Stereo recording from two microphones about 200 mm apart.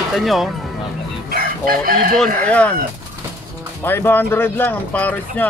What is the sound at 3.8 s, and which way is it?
Speech, 10° left (ahead or behind).